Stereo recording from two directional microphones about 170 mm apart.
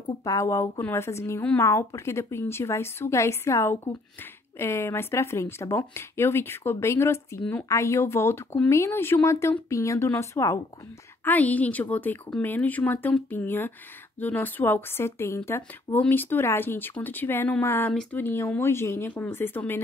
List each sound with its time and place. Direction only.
0.2 s speech: 20° left (ahead or behind)